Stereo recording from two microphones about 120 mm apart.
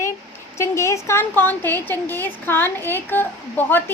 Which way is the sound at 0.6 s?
25° left (ahead or behind).